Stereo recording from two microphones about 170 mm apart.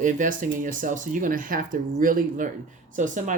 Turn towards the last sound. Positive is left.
turn(degrees=-50)  # may be behind; listen again after turning